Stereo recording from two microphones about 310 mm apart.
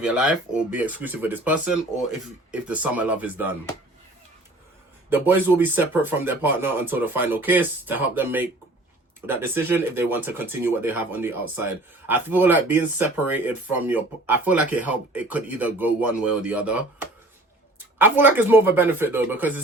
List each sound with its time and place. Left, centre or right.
0.0 s speech: centre
5.0 s speech: centre